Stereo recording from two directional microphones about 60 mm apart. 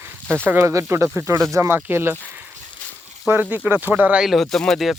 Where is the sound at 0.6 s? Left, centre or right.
Right.